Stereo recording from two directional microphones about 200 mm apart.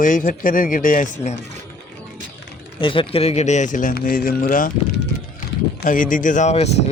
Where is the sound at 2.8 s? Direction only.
25° left (ahead or behind); by 4.7 s 45° left (ahead or behind).